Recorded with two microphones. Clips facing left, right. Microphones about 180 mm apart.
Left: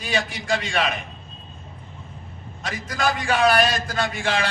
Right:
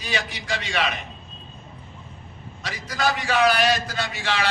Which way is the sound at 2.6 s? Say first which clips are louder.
Even; 50° left (ahead or behind).